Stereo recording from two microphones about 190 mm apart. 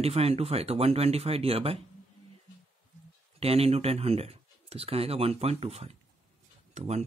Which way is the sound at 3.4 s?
30° right (ahead or behind).